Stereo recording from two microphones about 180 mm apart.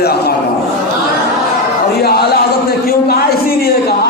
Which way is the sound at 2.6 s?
60° left (ahead or behind).